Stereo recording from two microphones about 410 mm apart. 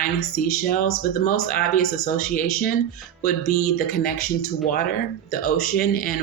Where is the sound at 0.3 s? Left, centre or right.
Centre.